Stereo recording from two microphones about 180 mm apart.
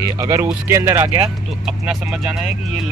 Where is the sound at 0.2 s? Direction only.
15° right (ahead or behind).